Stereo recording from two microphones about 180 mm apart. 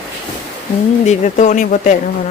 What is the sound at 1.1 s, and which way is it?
Speech, 40° left (ahead or behind).